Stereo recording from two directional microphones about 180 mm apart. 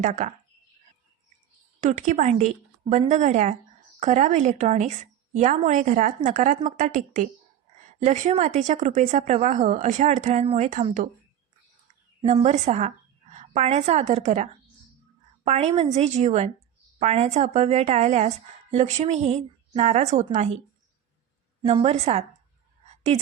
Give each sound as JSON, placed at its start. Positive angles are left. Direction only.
{"t": 0.0, "sound": "a woman's voice", "side_deg": -45}
{"t": 1.8, "sound": "a woman's voice", "side_deg": -45}
{"t": 12.2, "sound": "a woman's voice", "side_deg": -35}
{"t": 21.6, "sound": "a woman's voice", "side_deg": -30}